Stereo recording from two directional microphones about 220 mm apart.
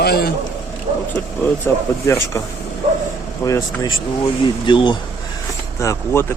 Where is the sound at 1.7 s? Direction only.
10° left (ahead or behind).